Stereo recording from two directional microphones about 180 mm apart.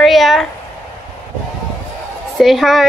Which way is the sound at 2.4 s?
Centre (ahead or behind).